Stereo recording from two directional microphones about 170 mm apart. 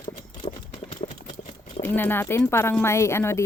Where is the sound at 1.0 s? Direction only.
40° left (ahead or behind).